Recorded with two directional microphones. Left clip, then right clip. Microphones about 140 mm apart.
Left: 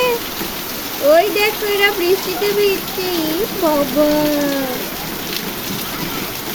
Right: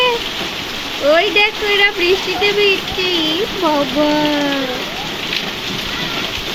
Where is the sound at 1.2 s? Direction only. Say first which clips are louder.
Right 1 dB; 15° left (ahead or behind).